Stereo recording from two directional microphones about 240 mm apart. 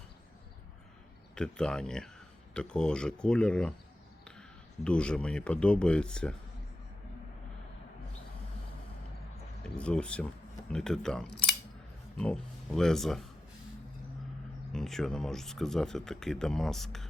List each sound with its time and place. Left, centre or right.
1.4 s speech: centre
9.7 s speech: centre
14.7 s speech: centre